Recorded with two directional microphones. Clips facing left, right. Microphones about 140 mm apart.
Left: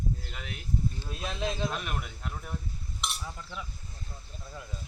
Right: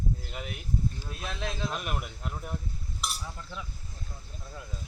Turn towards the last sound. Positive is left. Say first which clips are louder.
# even
turn(degrees=-5)  # may be behind; listen again after turning